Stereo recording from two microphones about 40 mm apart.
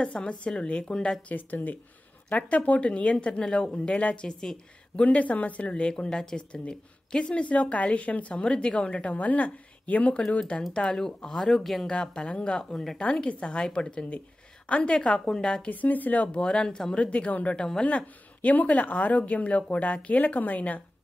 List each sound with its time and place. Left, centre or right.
0.0 s speech: left
1.3 s speech: left
2.4 s speech: left
4.3 s a woman's voice: centre
4.9 s speech: left
10.7 s a woman's voice: left
11.6 s speech: centre
11.9 s speech: left
12.5 s a woman's voice: centre
13.0 s speech: left
15.0 s speech: centre
15.7 s speech: left
16.3 s speech: left
16.9 s speech: left